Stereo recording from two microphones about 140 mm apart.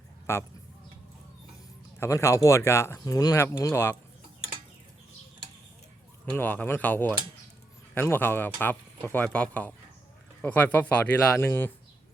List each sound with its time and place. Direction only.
0.3 s speech: 15° left (ahead or behind)
2.0 s speech: 20° left (ahead or behind)
6.3 s speech: 10° left (ahead or behind)